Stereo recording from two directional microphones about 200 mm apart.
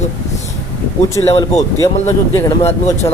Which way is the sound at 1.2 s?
20° left (ahead or behind).